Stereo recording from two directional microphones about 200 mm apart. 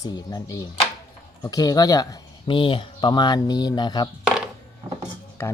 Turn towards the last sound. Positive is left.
turn(degrees=10)  # may be behind; listen again after turning